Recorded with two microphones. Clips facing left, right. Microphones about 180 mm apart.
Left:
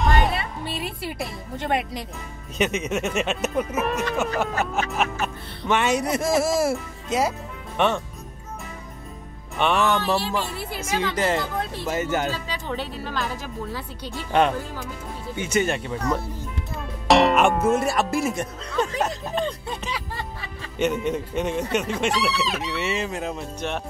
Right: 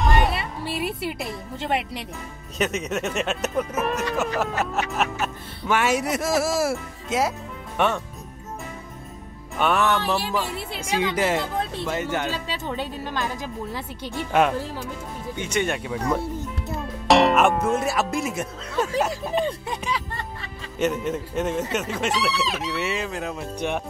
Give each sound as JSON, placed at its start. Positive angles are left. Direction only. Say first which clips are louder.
{"t": 0.0, "sound": "music", "louder": "even", "side_deg": 0}
{"t": 2.5, "sound": "speech", "louder": "left 1 dB", "side_deg": 0}
{"t": 9.6, "sound": "speech", "louder": "even", "side_deg": 0}
{"t": 10.8, "sound": "a woman's voice", "louder": "right 1 dB", "side_deg": -15}
{"t": 11.9, "sound": "speech", "louder": "left 4 dB", "side_deg": 5}
{"t": 12.6, "sound": "speech", "louder": "left 1 dB", "side_deg": -15}
{"t": 15.3, "sound": "speech", "louder": "left 2 dB", "side_deg": 5}
{"t": 23.6, "sound": "a woman's voice", "louder": "right 2 dB", "side_deg": -15}